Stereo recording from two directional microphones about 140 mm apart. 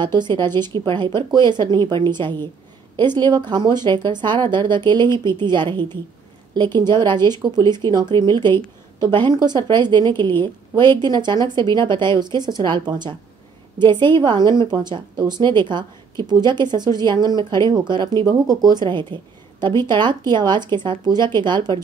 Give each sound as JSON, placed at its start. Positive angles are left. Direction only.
{"t": 0.0, "sound": "a woman's voice", "side_deg": -30}